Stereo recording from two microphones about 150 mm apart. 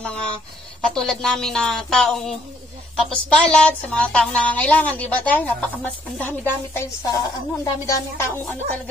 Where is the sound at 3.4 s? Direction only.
10° left (ahead or behind).